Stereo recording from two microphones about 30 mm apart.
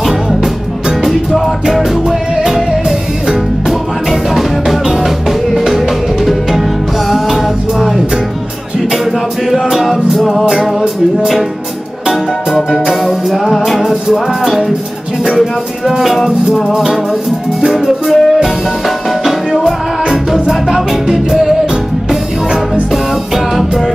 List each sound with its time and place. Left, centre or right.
0.0 s music: centre
2.4 s music: centre
9.5 s music: centre
12.1 s music: centre
12.8 s music: centre
16.0 s music: centre
17.7 s music: centre
19.6 s music: centre
22.8 s music: centre